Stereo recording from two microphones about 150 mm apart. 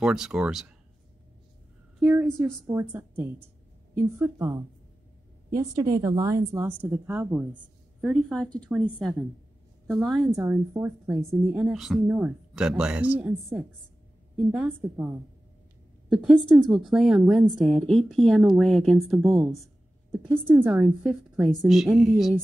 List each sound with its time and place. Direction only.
0.0 s a woman's voice: 5° right (ahead or behind)
2.0 s a woman's voice: 15° right (ahead or behind)
8.0 s a woman's voice: 5° left (ahead or behind)
10.3 s speech: 15° right (ahead or behind)
11.1 s a woman's voice: centre (ahead or behind)
19.5 s a sound: centre (ahead or behind)
20.2 s a woman's voice: 10° right (ahead or behind)